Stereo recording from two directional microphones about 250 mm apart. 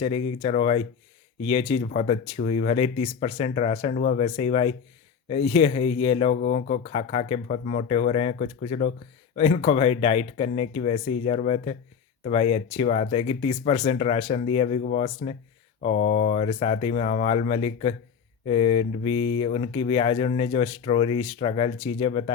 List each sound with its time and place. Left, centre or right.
0.4 s speech: left
3.9 s speech: left
4.2 s speech: left
14.8 s speech: left